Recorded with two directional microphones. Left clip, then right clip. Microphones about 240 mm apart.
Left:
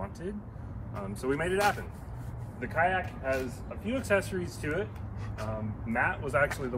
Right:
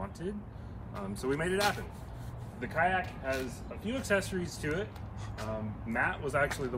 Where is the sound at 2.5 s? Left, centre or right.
Centre.